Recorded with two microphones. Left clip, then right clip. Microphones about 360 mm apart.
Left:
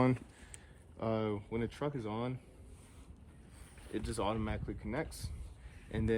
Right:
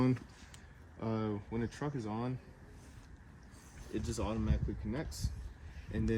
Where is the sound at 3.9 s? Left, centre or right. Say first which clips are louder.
Left 3 dB; centre.